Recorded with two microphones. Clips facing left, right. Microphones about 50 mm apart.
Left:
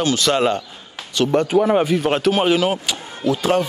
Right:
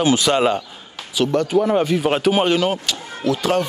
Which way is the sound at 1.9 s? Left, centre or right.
Centre.